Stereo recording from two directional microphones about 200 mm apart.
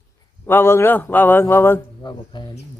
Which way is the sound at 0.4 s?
10° left (ahead or behind).